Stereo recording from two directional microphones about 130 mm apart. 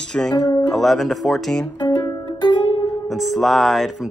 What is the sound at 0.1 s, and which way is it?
Speech, 15° left (ahead or behind).